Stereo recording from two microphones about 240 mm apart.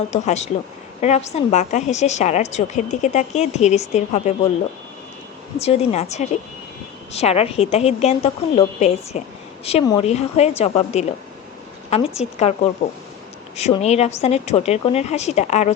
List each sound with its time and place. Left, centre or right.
0.1 s a woman's voice: left
5.5 s a woman's voice: left
13.6 s a woman's voice: left